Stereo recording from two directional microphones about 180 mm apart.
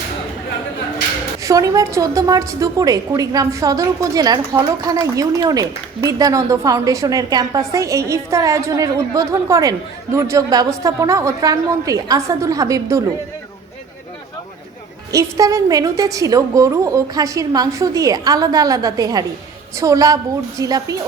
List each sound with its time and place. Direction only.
1.4 s a woman's voice: 20° right (ahead or behind)
15.1 s a woman's voice: 20° right (ahead or behind)